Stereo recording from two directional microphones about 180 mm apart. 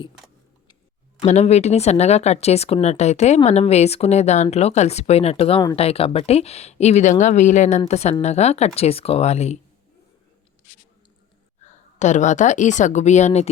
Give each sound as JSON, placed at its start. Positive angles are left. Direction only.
{"t": 1.2, "sound": "speech", "side_deg": 35}
{"t": 11.6, "sound": "a woman's voice", "side_deg": 40}